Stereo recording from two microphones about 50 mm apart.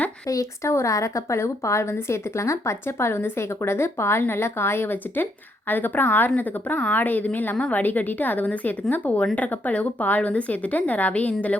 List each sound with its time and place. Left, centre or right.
0.3 s speech: left
0.6 s a woman's voice: left